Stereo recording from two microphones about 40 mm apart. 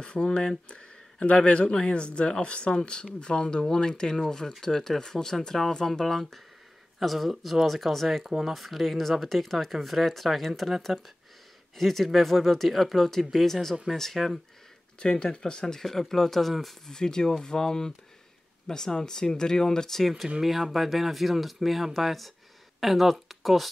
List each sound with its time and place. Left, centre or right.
0.0 s speech: left
0.7 s a sound: left
1.3 s speech: left; by 14.4 s centre
15.0 s speech: left; by 16.9 s centre
16.9 s speech: centre
20.0 s speech: centre